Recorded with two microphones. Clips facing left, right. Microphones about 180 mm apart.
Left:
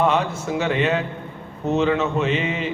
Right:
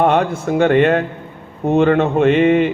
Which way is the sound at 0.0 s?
55° right (ahead or behind).